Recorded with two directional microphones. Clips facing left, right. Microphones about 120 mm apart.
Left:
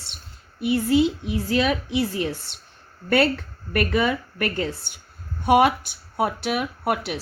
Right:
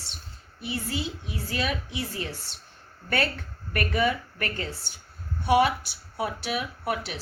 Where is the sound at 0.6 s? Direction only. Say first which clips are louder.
Left 13 dB; 60° left (ahead or behind).